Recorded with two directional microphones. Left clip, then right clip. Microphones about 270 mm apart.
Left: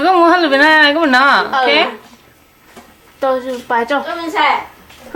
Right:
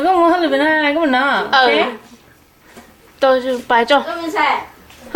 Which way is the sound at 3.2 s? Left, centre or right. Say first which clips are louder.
Right 2 dB; centre.